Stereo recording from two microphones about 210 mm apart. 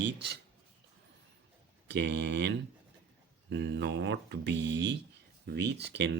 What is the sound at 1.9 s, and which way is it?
Speech, 55° right (ahead or behind).